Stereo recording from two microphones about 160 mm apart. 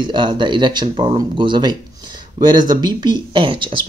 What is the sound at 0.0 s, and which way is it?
Speech, 30° right (ahead or behind).